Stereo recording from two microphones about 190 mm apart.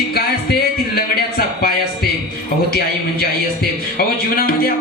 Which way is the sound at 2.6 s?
55° left (ahead or behind).